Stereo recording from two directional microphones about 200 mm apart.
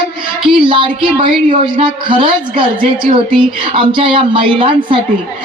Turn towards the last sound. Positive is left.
turn(degrees=-25)  # may be behind; listen again after turning